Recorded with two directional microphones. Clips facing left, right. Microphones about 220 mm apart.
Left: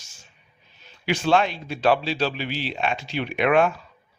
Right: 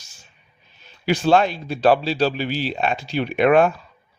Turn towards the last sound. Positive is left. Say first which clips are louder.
# right 4 dB
turn(degrees=-40)  # may be behind; listen again after turning